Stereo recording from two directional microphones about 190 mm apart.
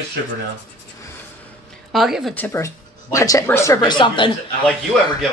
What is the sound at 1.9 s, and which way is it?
A woman's voice, centre (ahead or behind).